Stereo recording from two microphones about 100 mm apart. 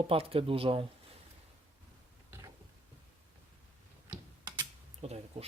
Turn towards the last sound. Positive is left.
turn(degrees=-90)